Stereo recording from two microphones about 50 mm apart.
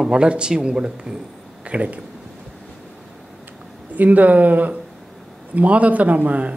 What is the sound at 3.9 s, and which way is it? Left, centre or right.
Speech, right.